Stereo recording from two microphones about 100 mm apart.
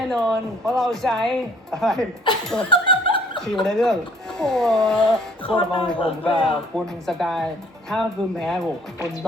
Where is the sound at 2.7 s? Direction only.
60° left (ahead or behind).